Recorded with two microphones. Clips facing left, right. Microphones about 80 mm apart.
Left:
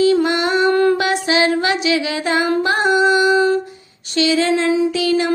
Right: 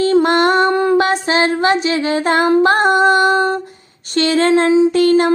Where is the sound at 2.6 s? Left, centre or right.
Right.